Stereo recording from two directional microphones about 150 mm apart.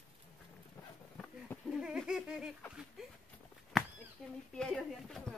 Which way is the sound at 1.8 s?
5° right (ahead or behind).